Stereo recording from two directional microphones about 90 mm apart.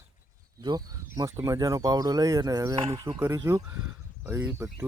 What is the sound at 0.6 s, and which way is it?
Speech, 50° right (ahead or behind).